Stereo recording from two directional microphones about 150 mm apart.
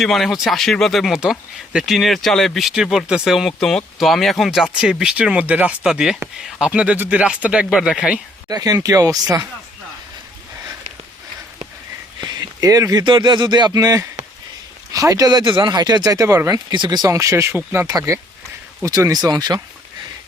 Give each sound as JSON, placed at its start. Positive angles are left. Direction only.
{"t": 0.0, "sound": "speech", "side_deg": 0}
{"t": 8.4, "sound": "speech", "side_deg": -25}
{"t": 12.2, "sound": "speech", "side_deg": -25}